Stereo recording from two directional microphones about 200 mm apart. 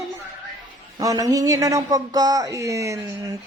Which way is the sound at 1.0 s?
15° right (ahead or behind).